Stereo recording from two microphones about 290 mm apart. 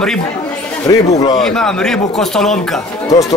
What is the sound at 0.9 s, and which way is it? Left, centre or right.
Speech, centre.